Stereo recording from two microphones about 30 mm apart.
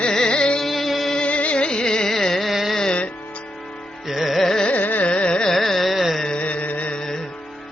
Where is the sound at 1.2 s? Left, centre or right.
Left.